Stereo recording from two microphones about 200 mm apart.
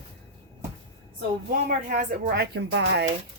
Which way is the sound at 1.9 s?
45° right (ahead or behind).